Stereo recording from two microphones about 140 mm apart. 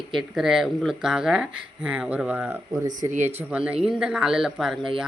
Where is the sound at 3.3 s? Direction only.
10° right (ahead or behind).